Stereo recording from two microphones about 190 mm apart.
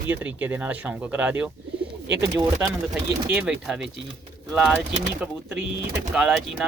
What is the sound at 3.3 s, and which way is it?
Speech, 5° right (ahead or behind).